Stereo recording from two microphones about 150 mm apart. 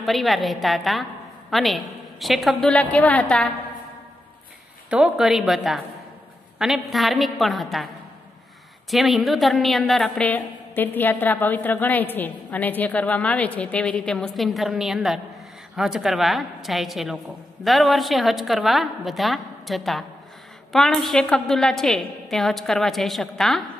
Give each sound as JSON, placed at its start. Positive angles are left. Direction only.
{"t": 0.0, "sound": "a woman's voice", "side_deg": 0}
{"t": 4.8, "sound": "a woman's voice", "side_deg": -5}
{"t": 8.9, "sound": "a woman's voice", "side_deg": 0}